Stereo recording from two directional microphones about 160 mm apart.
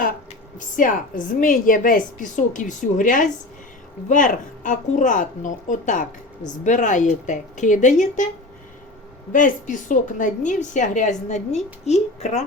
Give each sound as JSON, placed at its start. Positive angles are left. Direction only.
{"t": 0.8, "sound": "a woman's voice", "side_deg": 55}
{"t": 9.3, "sound": "a woman's voice", "side_deg": 55}